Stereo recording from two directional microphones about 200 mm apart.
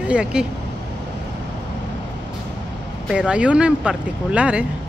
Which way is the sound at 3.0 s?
5° right (ahead or behind).